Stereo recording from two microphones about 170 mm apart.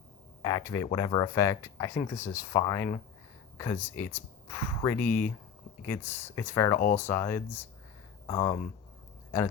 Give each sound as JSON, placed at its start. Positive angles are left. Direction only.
{"t": 0.4, "sound": "speech", "side_deg": 15}
{"t": 6.7, "sound": "speech", "side_deg": 45}
{"t": 7.0, "sound": "speech", "side_deg": 15}